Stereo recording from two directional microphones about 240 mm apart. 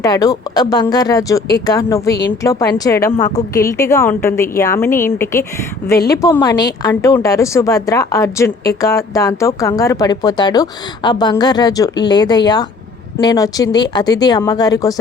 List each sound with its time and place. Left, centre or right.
0.0 s a woman's voice: centre